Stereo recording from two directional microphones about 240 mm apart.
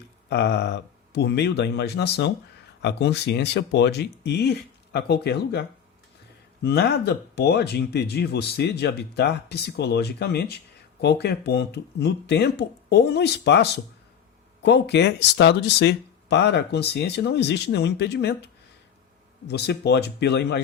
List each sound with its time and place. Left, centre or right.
0.3 s speech: left